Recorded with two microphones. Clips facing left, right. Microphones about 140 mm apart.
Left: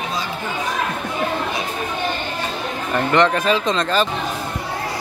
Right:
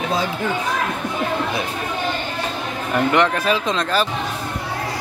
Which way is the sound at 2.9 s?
5° right (ahead or behind).